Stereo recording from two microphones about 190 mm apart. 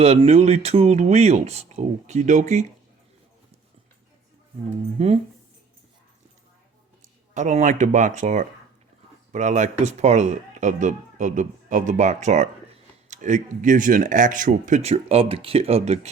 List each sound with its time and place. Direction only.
0.0 s speech: 35° right (ahead or behind)
4.9 s speech: 35° right (ahead or behind)
7.3 s speech: 40° right (ahead or behind)